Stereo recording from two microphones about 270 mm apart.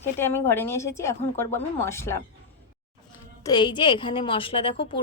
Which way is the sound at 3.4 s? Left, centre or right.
Centre.